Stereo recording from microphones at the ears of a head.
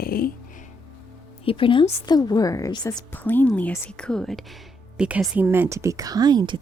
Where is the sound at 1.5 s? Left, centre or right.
Left.